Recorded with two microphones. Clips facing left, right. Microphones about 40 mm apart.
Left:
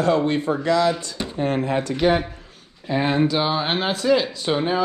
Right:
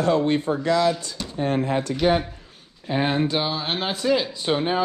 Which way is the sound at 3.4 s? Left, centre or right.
Centre.